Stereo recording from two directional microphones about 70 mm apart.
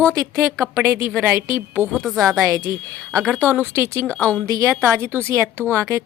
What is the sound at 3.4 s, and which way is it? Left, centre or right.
Speech, left.